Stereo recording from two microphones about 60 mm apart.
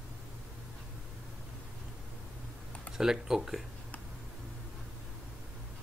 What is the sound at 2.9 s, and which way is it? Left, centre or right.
Speech, centre.